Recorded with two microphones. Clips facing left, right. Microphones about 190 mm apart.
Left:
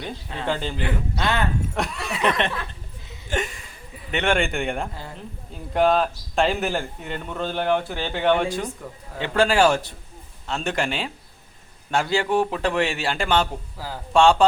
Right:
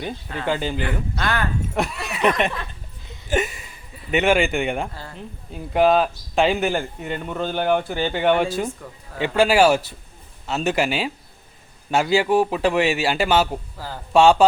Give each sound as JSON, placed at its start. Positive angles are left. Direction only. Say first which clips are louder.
{"t": 0.4, "sound": "a man's voice", "louder": "right 3 dB", "side_deg": -5}
{"t": 1.1, "sound": "speech", "louder": "left 2 dB", "side_deg": 25}
{"t": 1.7, "sound": "speech", "louder": "right 2 dB", "side_deg": -5}
{"t": 3.2, "sound": "a sound", "louder": "right 4 dB", "side_deg": -5}
{"t": 4.1, "sound": "a man's voice", "louder": "right 4 dB", "side_deg": -5}
{"t": 13.7, "sound": "speech", "louder": "even", "side_deg": 10}
{"t": 14.1, "sound": "a man's voice", "louder": "right 2 dB", "side_deg": -5}